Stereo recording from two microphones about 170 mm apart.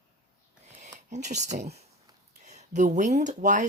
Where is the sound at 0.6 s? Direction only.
40° right (ahead or behind).